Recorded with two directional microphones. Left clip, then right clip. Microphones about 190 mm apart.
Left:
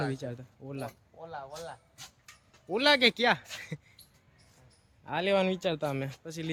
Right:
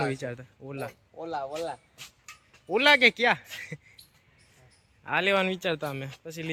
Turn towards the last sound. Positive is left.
turn(degrees=10)  # may be behind; listen again after turning